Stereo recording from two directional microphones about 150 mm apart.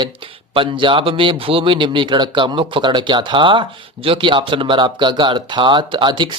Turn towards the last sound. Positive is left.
turn(degrees=-30)  # may be behind; listen again after turning